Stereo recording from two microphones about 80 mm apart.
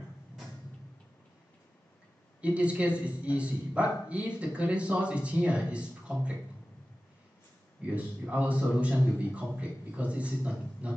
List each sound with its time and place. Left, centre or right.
2.4 s a man's voice: centre
7.8 s a man's voice: centre